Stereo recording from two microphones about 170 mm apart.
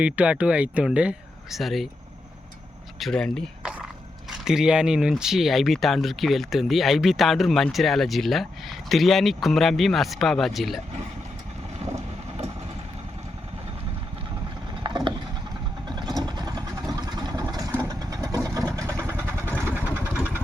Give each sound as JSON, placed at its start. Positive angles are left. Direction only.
{"t": 0.0, "sound": "speech", "side_deg": -5}
{"t": 3.0, "sound": "speech", "side_deg": 5}
{"t": 14.8, "sound": "vehicle", "side_deg": -25}